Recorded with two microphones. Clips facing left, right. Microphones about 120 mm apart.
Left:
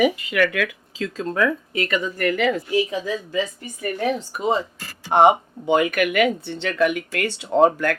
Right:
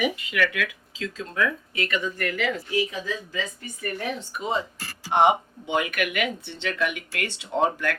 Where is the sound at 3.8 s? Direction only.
40° left (ahead or behind).